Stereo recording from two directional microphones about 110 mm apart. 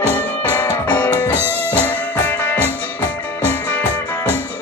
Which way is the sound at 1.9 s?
15° left (ahead or behind).